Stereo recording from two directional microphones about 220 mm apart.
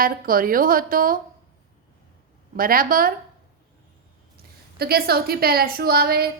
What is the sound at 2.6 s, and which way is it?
Speech, 40° right (ahead or behind).